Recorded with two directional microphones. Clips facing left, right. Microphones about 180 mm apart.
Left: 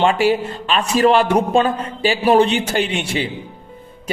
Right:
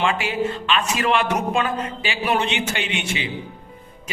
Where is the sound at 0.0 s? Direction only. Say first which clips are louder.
Left 6 dB; 35° left (ahead or behind).